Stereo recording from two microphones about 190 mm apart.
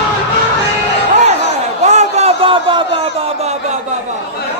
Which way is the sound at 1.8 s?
35° right (ahead or behind).